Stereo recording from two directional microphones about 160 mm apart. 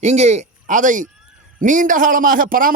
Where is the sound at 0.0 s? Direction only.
45° right (ahead or behind).